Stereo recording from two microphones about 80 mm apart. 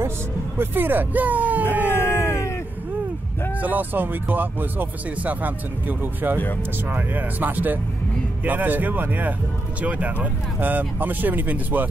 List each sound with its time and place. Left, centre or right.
0.6 s speech: right
3.6 s speech: right